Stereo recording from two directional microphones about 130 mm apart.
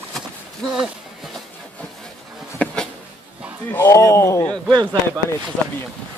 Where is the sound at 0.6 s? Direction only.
5° left (ahead or behind).